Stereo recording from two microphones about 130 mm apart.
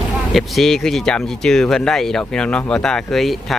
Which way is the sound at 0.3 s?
Centre (ahead or behind).